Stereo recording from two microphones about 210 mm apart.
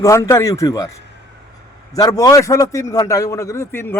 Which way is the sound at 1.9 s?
15° left (ahead or behind).